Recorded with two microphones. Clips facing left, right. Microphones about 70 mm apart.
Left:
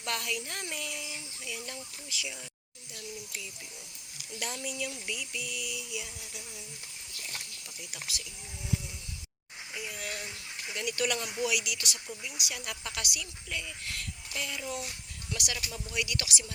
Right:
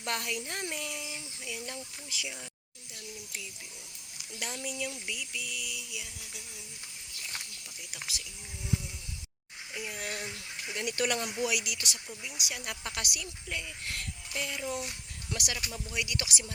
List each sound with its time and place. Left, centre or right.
0.0 s speech: right
1.1 s speech: centre
1.6 s speech: right
4.4 s a sound: centre
7.9 s speech: centre
9.8 s speech: right
12.2 s speech: centre
12.6 s speech: right
14.3 s speech: centre
15.3 s speech: right